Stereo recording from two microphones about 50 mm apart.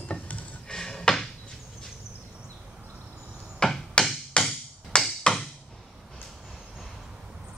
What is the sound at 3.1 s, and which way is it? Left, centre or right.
Chop, centre.